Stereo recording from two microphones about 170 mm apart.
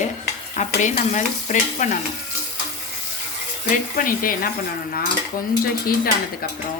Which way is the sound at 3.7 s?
55° left (ahead or behind).